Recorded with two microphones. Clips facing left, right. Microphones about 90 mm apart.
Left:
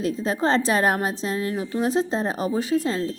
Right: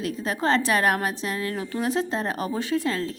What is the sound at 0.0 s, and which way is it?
Speech, 25° left (ahead or behind).